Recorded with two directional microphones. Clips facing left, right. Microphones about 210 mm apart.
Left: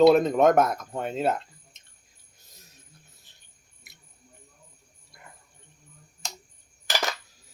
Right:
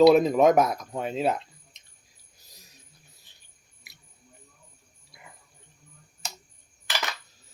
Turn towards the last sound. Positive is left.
turn(degrees=45)  # may be behind; listen again after turning